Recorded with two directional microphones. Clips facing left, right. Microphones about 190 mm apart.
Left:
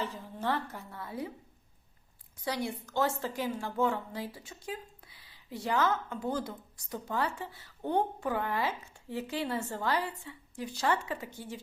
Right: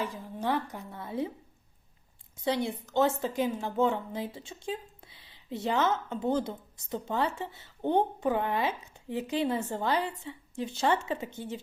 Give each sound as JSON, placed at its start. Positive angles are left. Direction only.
{"t": 0.0, "sound": "speech", "side_deg": -15}
{"t": 2.4, "sound": "a woman's voice", "side_deg": -25}